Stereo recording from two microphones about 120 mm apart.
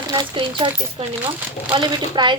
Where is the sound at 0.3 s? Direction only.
45° right (ahead or behind).